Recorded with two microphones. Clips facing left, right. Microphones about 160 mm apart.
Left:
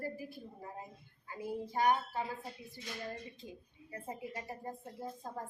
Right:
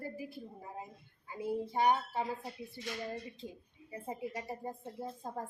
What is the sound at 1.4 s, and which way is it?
Speech, 25° right (ahead or behind).